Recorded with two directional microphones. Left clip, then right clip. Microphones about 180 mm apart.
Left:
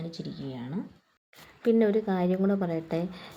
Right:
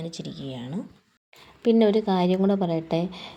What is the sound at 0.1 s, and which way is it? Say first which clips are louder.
Speech: right 3 dB; 30° right (ahead or behind).